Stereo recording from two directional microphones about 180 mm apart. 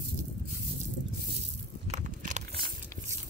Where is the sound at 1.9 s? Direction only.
40° right (ahead or behind).